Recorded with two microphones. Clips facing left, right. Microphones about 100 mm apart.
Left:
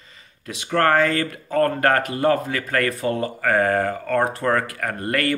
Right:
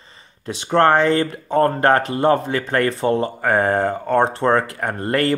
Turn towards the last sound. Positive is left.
turn(degrees=-30)  # may be behind; listen again after turning